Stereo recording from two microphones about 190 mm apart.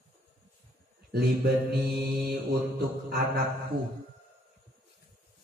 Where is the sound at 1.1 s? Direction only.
55° right (ahead or behind).